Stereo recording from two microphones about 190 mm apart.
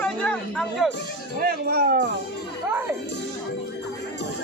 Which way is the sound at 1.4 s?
55° right (ahead or behind).